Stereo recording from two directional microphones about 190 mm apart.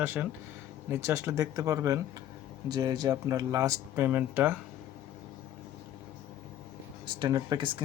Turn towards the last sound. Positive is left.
turn(degrees=-25)  # may be behind; listen again after turning